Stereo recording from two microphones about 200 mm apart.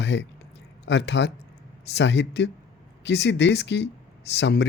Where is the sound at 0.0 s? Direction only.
60° left (ahead or behind).